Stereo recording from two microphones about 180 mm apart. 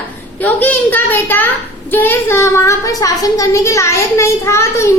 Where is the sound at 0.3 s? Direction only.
10° left (ahead or behind).